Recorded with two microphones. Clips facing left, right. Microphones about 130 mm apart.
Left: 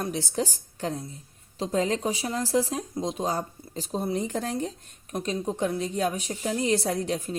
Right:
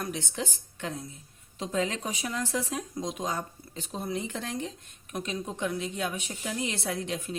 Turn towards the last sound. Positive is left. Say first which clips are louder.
# left 5 dB
turn(degrees=40)  # may be behind; listen again after turning